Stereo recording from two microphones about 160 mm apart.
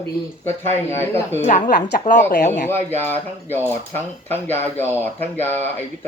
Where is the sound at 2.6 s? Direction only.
10° left (ahead or behind).